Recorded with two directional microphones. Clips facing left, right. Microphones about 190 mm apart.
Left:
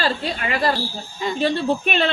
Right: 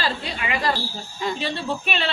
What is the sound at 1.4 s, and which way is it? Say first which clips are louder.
Speech: left 7 dB; 50° left (ahead or behind).